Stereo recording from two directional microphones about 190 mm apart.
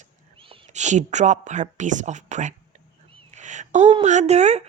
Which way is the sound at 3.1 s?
40° right (ahead or behind).